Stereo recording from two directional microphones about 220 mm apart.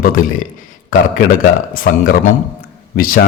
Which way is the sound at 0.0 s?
40° left (ahead or behind).